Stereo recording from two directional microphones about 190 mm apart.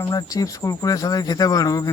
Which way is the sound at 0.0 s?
20° left (ahead or behind).